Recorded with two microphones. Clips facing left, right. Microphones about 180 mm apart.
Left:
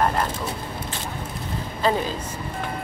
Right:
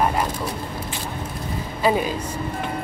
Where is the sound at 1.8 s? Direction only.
15° right (ahead or behind).